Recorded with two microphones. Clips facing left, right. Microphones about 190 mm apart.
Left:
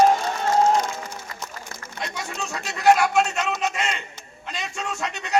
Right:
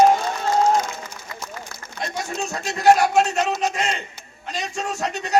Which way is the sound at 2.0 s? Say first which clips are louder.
Right 4 dB; 40° right (ahead or behind).